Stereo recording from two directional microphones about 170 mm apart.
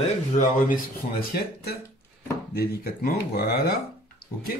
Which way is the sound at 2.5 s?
65° left (ahead or behind).